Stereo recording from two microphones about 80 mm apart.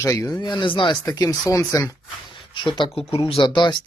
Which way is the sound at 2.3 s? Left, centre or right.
Left.